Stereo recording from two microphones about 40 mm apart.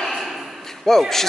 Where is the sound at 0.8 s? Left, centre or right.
Centre.